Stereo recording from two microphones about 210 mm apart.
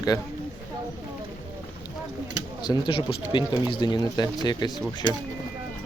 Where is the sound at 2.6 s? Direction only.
20° left (ahead or behind).